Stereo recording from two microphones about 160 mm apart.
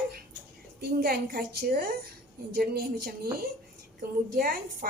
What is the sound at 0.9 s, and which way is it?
A woman's voice, 65° right (ahead or behind).